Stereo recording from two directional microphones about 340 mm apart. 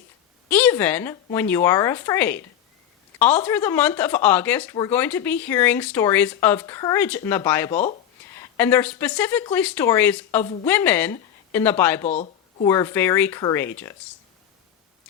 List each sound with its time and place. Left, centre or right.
0.5 s speech: centre
12.0 s a sound: left
12.6 s speech: centre